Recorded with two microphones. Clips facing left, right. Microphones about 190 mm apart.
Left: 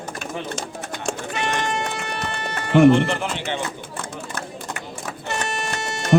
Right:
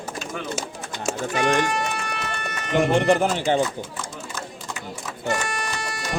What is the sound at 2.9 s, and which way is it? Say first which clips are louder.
Speech: right 4 dB; 45° right (ahead or behind).